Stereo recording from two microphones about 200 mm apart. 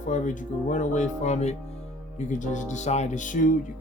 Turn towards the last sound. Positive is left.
turn(degrees=40)  # may be behind; listen again after turning